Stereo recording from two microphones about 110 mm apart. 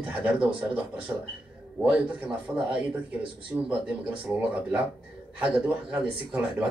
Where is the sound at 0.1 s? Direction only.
15° right (ahead or behind).